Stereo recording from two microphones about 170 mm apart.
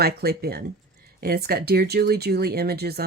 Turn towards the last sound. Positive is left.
turn(degrees=-65)  # may be behind; listen again after turning